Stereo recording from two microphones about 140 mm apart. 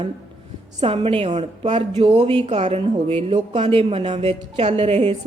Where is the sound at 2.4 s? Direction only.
50° right (ahead or behind).